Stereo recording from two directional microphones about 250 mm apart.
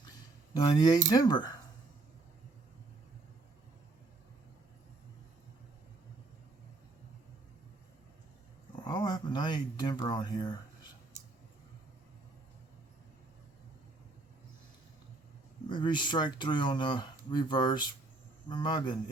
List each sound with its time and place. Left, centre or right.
0.5 s speech: centre
8.9 s speech: centre
15.7 s speech: centre